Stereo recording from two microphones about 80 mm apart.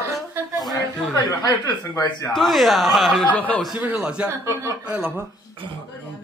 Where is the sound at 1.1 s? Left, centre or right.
Left.